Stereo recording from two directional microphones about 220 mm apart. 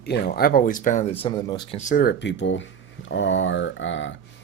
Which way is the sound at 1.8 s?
40° left (ahead or behind).